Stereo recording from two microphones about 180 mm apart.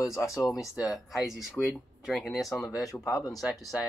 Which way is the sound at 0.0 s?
15° left (ahead or behind).